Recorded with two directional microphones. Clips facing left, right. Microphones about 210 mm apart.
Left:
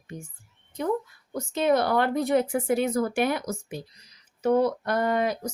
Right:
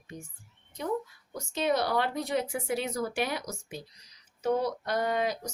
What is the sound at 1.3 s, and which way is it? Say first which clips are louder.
Speech: left 6 dB; 55° left (ahead or behind).